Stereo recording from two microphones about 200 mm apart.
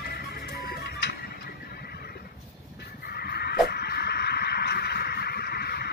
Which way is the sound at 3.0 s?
50° left (ahead or behind).